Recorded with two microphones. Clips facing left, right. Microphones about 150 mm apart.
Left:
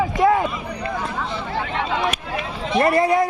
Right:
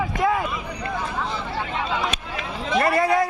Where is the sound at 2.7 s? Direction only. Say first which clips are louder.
Left 3 dB; 25° left (ahead or behind).